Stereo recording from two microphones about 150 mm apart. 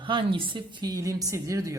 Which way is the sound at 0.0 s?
35° right (ahead or behind).